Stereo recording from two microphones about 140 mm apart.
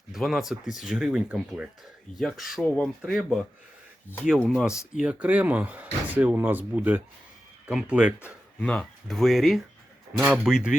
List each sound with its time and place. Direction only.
0.1 s speech: centre (ahead or behind)
2.6 s speech: 10° left (ahead or behind)
3.0 s speech: centre (ahead or behind)
4.9 s speech: 10° right (ahead or behind)
8.5 s speech: 10° left (ahead or behind)
10.2 s speech: 15° right (ahead or behind)
10.4 s speech: 5° right (ahead or behind)